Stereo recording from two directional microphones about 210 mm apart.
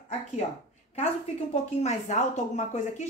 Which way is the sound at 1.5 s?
35° left (ahead or behind).